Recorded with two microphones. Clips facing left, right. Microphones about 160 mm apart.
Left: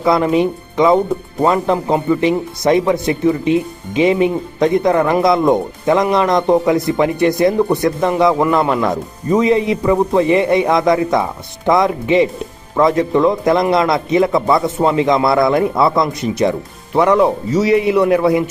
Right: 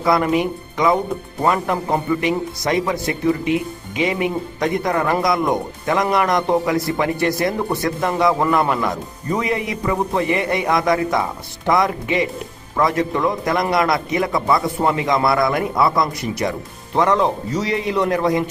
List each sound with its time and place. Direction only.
0.0 s speech: 25° left (ahead or behind)